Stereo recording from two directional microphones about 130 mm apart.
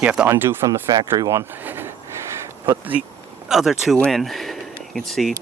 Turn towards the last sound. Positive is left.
turn(degrees=0)  # may be behind; listen again after turning